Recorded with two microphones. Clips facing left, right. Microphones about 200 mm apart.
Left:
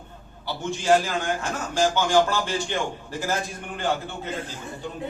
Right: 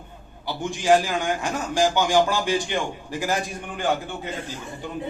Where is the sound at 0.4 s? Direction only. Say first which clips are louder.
Right 2 dB; 15° right (ahead or behind).